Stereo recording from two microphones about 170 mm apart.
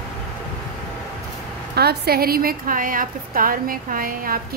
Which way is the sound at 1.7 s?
70° right (ahead or behind).